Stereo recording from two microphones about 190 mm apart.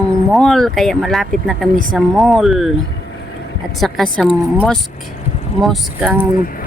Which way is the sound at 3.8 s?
Centre (ahead or behind).